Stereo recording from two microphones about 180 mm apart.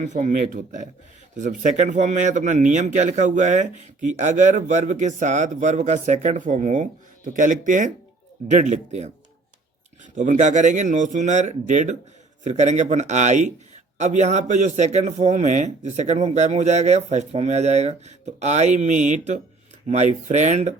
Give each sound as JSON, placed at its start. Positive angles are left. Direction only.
{"t": 0.0, "sound": "a man's voice", "side_deg": -45}
{"t": 10.2, "sound": "a man's voice", "side_deg": -40}